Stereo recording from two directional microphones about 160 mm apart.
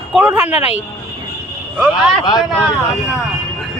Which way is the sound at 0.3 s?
15° right (ahead or behind).